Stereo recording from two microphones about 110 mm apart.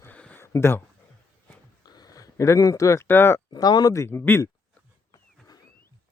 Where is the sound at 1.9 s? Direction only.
35° left (ahead or behind).